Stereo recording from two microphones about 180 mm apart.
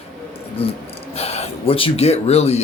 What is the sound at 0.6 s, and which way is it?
Speech, 30° left (ahead or behind).